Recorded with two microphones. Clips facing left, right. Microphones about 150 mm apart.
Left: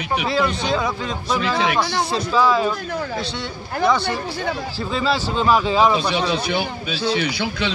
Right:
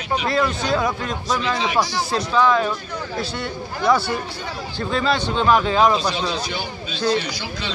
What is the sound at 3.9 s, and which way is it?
Speech, 5° right (ahead or behind).